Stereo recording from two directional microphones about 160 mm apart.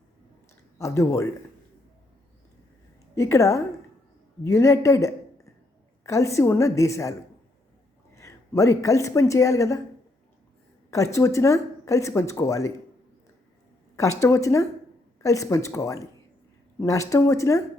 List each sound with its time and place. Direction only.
0.8 s speech: 20° left (ahead or behind)
3.2 s speech: 20° left (ahead or behind)
10.9 s speech: 20° left (ahead or behind)
13.9 s speech: 20° left (ahead or behind)